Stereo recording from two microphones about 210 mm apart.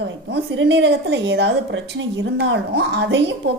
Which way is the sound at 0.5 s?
60° right (ahead or behind).